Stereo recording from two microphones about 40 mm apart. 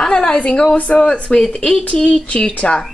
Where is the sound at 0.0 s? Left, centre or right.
Left.